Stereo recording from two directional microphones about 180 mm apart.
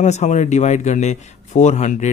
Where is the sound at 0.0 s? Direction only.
40° left (ahead or behind).